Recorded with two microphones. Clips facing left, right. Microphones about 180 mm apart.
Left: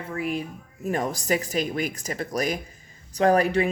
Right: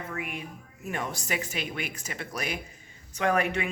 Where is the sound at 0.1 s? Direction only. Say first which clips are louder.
Left 8 dB; 35° left (ahead or behind).